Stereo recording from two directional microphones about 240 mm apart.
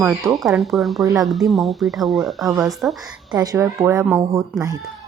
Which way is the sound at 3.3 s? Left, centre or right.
Centre.